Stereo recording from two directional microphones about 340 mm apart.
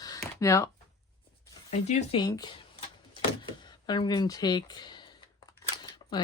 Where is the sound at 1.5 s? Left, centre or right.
Centre.